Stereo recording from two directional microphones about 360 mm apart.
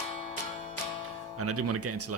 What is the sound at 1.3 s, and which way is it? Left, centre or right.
Speech, right.